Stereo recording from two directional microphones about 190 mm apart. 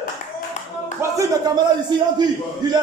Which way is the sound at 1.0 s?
15° right (ahead or behind).